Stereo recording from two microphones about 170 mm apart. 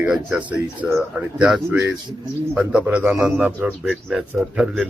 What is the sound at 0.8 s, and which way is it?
Speech, 15° right (ahead or behind).